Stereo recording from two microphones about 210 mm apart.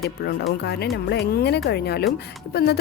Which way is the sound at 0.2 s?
50° left (ahead or behind).